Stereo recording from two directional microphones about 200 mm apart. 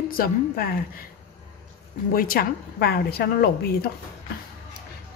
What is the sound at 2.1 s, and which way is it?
A woman's voice, 45° left (ahead or behind).